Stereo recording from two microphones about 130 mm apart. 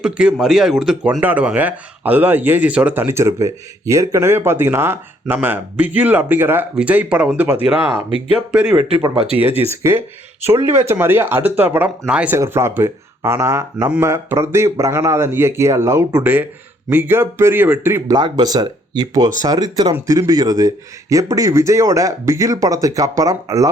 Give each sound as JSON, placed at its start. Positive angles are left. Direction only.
{"t": 0.0, "sound": "a man's voice", "side_deg": -5}
{"t": 12.4, "sound": "a man's voice", "side_deg": -20}
{"t": 18.1, "sound": "a man's voice", "side_deg": -30}